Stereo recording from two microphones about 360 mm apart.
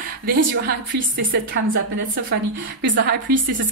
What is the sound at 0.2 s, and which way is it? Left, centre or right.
A woman's voice, right.